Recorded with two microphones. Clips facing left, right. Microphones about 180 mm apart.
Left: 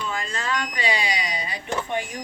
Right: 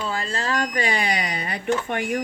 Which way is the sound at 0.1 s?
35° right (ahead or behind).